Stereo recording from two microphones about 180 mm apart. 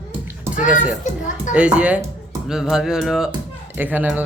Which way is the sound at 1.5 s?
5° right (ahead or behind).